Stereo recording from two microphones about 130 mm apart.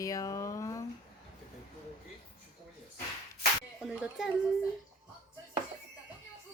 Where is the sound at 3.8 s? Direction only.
5° right (ahead or behind).